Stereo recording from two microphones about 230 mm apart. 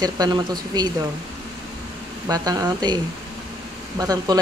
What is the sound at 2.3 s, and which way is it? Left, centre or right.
Speech, centre.